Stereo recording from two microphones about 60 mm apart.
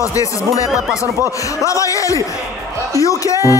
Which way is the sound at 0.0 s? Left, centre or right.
Left.